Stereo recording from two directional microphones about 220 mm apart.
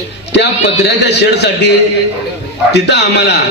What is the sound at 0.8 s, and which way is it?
A man's voice, 50° left (ahead or behind).